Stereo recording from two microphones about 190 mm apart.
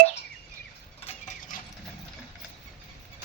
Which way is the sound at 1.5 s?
45° left (ahead or behind).